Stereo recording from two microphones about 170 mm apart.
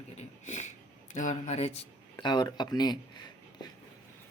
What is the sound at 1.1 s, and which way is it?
Speech, 45° left (ahead or behind).